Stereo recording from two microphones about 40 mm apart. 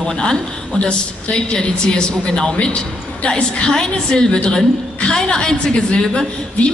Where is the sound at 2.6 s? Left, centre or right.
Left.